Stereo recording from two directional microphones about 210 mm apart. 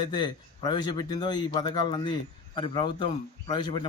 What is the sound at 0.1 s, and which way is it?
Speech, 20° left (ahead or behind).